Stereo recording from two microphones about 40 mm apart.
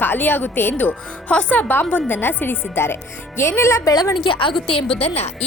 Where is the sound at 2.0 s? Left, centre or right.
Left.